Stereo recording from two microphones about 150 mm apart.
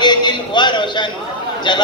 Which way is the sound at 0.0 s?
30° left (ahead or behind).